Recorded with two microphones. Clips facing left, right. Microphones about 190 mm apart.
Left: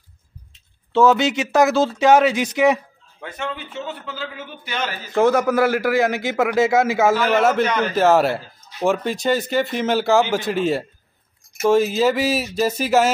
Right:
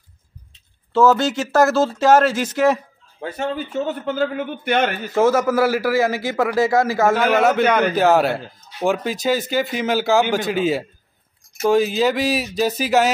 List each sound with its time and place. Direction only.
1.1 s speech: 20° left (ahead or behind)
1.6 s speech: 5° right (ahead or behind)
2.5 s speech: 15° left (ahead or behind)
3.2 s a man's voice: 35° right (ahead or behind); by 5.1 s 60° right (ahead or behind)
5.1 s speech: 5° right (ahead or behind)